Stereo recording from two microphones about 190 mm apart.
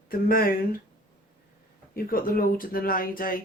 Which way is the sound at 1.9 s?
50° left (ahead or behind).